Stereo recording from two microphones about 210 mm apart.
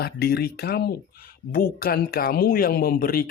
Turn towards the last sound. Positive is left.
turn(degrees=45)  # may be behind; listen again after turning